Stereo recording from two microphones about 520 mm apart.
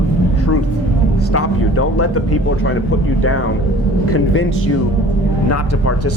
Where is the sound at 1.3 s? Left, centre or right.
Left.